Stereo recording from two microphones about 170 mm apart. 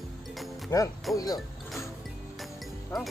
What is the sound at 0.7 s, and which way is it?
Speech, 15° left (ahead or behind).